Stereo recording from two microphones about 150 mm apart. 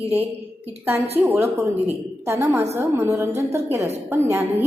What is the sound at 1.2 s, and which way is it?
A woman's voice, 15° right (ahead or behind).